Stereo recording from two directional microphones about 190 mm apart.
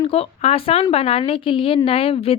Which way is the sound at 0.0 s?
30° left (ahead or behind).